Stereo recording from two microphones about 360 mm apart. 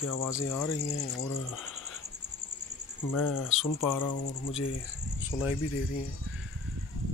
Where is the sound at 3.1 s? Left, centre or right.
Left.